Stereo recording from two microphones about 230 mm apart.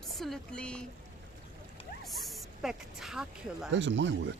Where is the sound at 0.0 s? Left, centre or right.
Centre.